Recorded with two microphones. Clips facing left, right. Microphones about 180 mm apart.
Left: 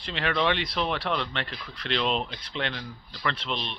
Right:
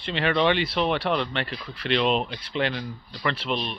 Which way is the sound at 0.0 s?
Centre (ahead or behind).